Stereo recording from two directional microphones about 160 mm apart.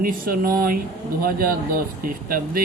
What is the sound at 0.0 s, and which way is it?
Speech, 65° right (ahead or behind).